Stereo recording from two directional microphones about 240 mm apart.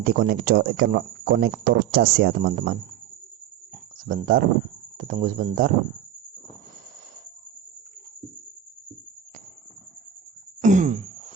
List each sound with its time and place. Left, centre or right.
0.0 s speech: right
4.0 s speech: right
10.6 s throat clearing: right